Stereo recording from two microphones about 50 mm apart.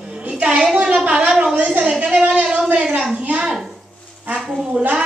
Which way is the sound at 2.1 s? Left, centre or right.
Centre.